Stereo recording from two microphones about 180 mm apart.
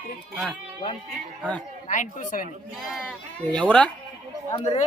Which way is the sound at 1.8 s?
45° left (ahead or behind).